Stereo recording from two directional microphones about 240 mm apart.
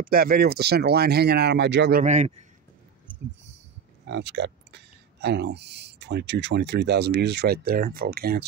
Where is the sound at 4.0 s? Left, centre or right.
Right.